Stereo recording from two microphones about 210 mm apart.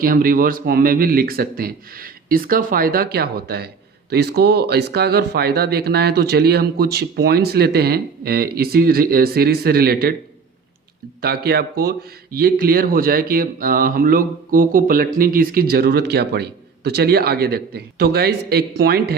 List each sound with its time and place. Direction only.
0.0 s speech: 45° right (ahead or behind)
11.2 s speech: 50° right (ahead or behind)